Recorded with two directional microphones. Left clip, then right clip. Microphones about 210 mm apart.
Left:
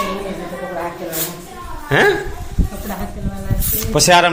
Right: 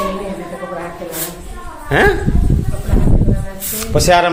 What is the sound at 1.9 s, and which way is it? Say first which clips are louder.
Speech: right 1 dB; centre (ahead or behind).